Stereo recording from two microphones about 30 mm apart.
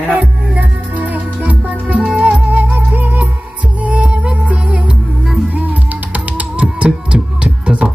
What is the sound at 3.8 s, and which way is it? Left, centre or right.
Music, right.